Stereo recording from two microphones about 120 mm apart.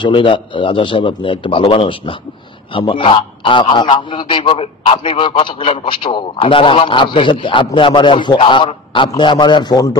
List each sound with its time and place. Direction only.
0.0 s a man's voice: 45° left (ahead or behind)